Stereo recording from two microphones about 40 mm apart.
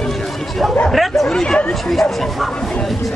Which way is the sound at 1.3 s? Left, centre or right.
Centre.